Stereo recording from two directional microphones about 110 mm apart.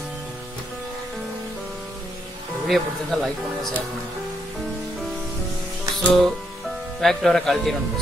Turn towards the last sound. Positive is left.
turn(degrees=0)  # may be behind; listen again after turning